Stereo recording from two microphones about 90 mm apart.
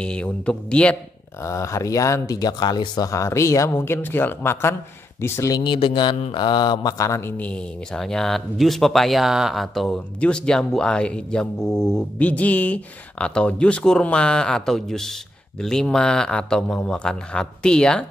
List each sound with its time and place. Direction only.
0.0 s speech: 10° left (ahead or behind)
1.4 s speech: 35° left (ahead or behind)
5.6 s speech: 65° left (ahead or behind); by 7.1 s 50° left (ahead or behind)
7.1 s speech: 30° left (ahead or behind)
7.3 s speech: 15° left (ahead or behind)